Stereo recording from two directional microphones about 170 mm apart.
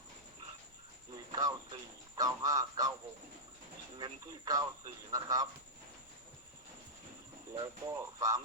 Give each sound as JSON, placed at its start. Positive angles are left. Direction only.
{"t": 1.1, "sound": "a sound", "side_deg": -25}
{"t": 2.1, "sound": "speech", "side_deg": -20}
{"t": 3.9, "sound": "speech", "side_deg": -25}
{"t": 7.5, "sound": "speech", "side_deg": -20}